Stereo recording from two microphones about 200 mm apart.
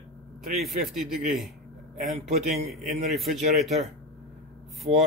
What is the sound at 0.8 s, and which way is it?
Speech, centre (ahead or behind).